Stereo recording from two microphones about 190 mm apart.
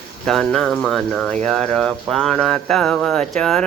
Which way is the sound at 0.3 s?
5° left (ahead or behind).